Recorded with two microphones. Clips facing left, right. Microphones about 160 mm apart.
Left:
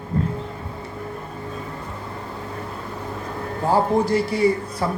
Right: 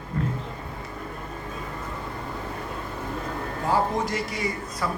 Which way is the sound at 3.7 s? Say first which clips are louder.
Left 6 dB; 30° left (ahead or behind).